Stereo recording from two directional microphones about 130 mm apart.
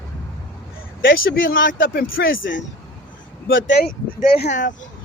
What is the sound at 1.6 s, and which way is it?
Speech, 90° left.